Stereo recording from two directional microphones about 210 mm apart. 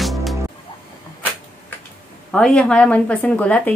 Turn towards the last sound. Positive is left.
turn(degrees=5)  # may be behind; listen again after turning